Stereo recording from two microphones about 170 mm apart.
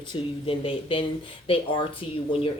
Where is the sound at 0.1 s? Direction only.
35° left (ahead or behind).